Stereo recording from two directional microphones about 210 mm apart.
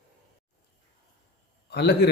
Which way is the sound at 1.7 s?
50° left (ahead or behind).